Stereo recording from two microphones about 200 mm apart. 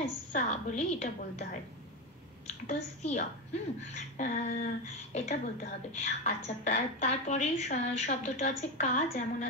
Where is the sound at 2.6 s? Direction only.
35° left (ahead or behind).